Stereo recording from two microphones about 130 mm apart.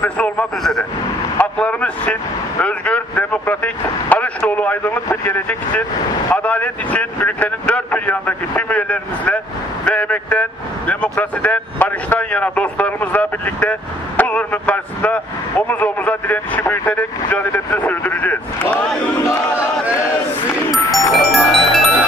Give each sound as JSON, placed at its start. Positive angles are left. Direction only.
{"t": 0.0, "sound": "speech", "side_deg": 10}
{"t": 19.2, "sound": "battle cry", "side_deg": 20}
{"t": 19.9, "sound": "a sound", "side_deg": 20}
{"t": 21.1, "sound": "music", "side_deg": 0}